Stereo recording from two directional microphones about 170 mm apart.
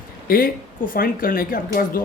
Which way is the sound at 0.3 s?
60° left (ahead or behind).